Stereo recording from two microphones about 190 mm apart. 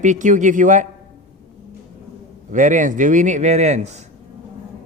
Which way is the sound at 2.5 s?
40° right (ahead or behind).